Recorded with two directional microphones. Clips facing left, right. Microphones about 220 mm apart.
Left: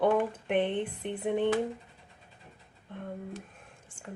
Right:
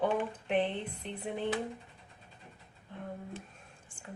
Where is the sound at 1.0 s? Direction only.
60° left (ahead or behind).